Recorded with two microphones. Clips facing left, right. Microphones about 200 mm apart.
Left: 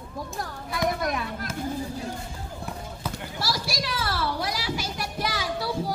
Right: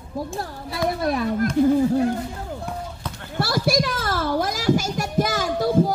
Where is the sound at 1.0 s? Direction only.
35° right (ahead or behind).